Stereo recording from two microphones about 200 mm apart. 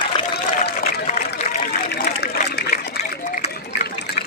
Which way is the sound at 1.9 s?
50° left (ahead or behind).